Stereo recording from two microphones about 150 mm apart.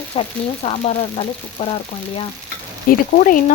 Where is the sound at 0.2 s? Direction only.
45° left (ahead or behind).